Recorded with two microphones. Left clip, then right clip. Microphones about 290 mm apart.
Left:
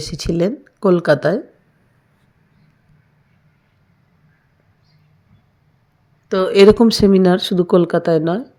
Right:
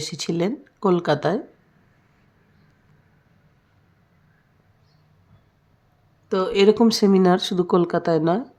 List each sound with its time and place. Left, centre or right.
0.0 s speech: centre
6.2 s speech: centre
6.5 s speech: centre